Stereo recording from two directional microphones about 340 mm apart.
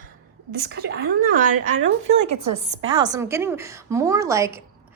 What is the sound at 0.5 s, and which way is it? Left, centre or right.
A woman's voice, right.